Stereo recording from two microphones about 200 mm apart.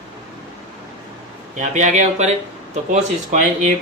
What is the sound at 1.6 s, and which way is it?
Speech, 40° right (ahead or behind).